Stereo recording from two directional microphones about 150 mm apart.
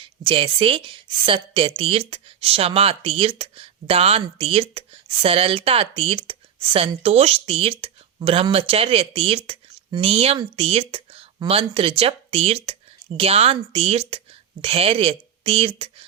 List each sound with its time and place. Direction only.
0.0 s a woman's voice: 35° right (ahead or behind)